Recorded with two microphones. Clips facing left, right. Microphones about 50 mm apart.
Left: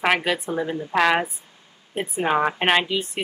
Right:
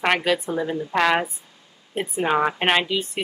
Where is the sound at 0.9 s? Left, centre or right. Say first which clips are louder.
Left 1 dB; centre.